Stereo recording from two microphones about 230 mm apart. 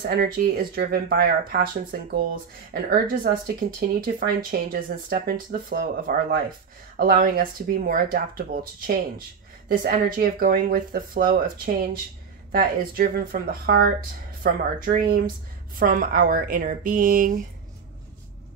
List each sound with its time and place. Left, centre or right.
0.0 s speech: right